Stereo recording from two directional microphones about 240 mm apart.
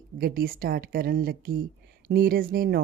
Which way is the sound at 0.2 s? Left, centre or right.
Right.